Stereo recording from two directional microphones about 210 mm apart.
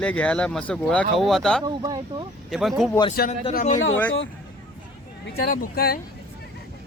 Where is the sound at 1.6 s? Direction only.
20° right (ahead or behind).